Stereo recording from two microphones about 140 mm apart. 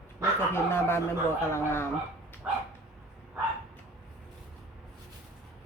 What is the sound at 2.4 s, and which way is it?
Dog, 10° right (ahead or behind).